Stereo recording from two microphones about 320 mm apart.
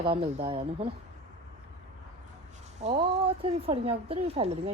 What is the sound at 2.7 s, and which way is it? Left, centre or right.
A woman's voice, right.